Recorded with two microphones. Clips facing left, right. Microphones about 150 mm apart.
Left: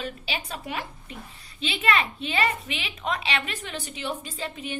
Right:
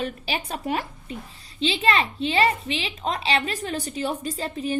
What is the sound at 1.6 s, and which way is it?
A woman's voice, 30° right (ahead or behind).